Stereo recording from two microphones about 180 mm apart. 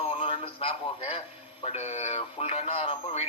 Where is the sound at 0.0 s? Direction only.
35° left (ahead or behind).